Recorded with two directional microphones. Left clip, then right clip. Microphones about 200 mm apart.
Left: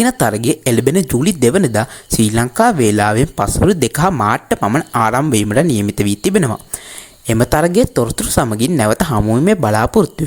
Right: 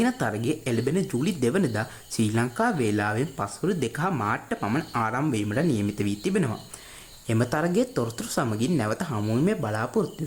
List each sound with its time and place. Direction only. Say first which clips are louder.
0.0 s speech: left 11 dB; 40° left (ahead or behind)